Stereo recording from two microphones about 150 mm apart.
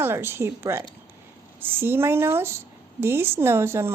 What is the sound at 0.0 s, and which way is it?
A woman's voice, 15° right (ahead or behind).